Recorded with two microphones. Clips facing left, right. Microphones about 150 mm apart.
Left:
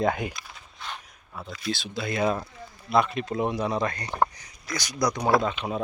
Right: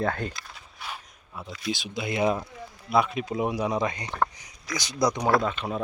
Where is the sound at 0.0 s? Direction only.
15° left (ahead or behind).